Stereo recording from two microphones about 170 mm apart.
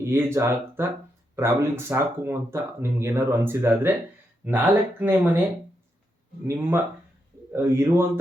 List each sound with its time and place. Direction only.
0.0 s speech: 15° right (ahead or behind)
6.5 s speech: 15° right (ahead or behind)